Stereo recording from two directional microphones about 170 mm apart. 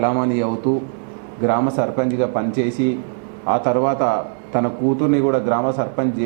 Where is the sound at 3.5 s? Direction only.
15° right (ahead or behind).